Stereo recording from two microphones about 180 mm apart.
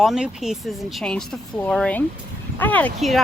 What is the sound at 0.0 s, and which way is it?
Speech, centre (ahead or behind).